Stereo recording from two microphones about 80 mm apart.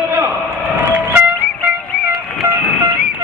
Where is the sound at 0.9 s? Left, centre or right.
Centre.